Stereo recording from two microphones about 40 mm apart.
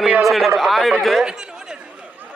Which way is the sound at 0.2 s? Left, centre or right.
Centre.